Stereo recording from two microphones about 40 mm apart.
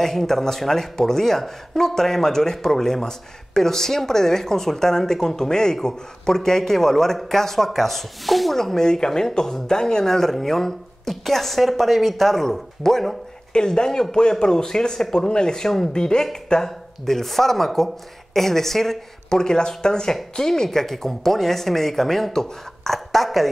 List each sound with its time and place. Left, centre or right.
0.0 s speech: centre
8.5 s a woman's voice: centre